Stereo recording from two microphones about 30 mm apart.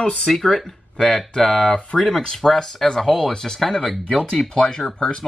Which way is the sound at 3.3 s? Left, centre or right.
Centre.